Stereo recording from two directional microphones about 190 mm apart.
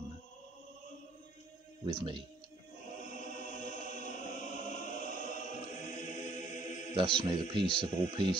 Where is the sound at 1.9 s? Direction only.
25° right (ahead or behind).